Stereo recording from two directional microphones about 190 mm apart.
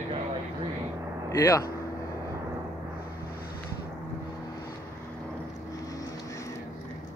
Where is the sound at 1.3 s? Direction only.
15° left (ahead or behind).